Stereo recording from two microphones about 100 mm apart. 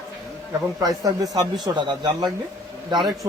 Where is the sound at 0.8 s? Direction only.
35° right (ahead or behind).